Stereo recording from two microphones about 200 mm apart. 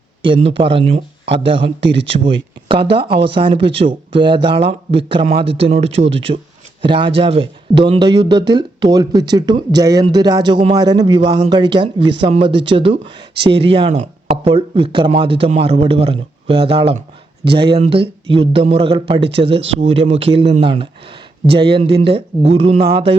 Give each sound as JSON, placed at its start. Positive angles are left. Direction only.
{"t": 0.2, "sound": "speech", "side_deg": -25}
{"t": 1.8, "sound": "speech", "side_deg": -60}
{"t": 2.0, "sound": "speech", "side_deg": -25}